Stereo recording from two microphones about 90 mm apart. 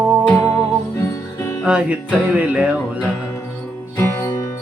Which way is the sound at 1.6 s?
15° right (ahead or behind).